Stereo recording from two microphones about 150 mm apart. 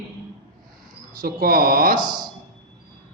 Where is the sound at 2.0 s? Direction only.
30° right (ahead or behind).